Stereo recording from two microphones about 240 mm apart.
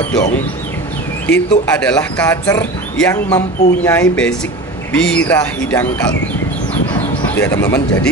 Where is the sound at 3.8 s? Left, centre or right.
Centre.